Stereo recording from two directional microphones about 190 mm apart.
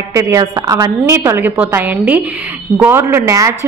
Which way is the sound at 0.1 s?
15° right (ahead or behind).